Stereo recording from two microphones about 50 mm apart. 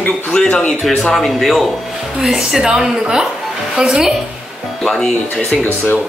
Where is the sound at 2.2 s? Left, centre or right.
Centre.